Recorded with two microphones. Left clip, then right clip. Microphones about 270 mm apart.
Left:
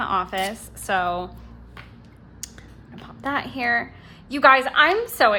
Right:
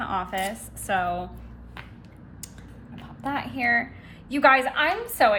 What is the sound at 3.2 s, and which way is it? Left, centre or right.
A woman's voice, left.